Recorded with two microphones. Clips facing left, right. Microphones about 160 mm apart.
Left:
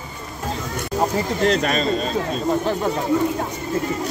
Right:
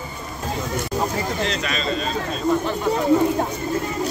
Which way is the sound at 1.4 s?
50° left (ahead or behind).